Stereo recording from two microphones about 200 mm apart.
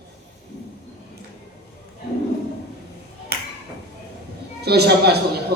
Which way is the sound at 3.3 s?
50° right (ahead or behind).